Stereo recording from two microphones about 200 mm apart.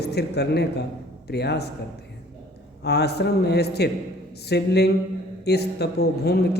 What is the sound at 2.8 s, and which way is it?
Speech, 55° left (ahead or behind).